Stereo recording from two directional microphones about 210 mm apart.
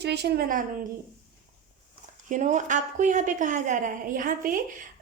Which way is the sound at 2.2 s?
35° right (ahead or behind).